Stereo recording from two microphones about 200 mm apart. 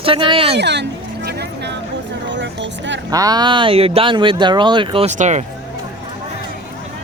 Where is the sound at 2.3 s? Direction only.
65° right (ahead or behind).